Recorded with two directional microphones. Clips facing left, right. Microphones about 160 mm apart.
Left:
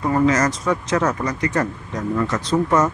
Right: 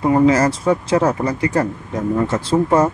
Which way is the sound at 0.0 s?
25° right (ahead or behind).